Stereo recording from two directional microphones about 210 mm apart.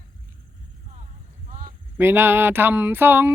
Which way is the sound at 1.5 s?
40° right (ahead or behind).